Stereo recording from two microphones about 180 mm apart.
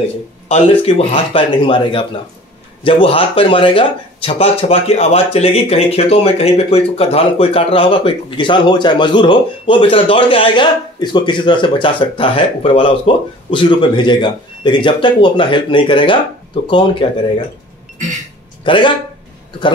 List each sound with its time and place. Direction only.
0.5 s speech: 35° left (ahead or behind)
18.6 s a man's voice: 25° left (ahead or behind)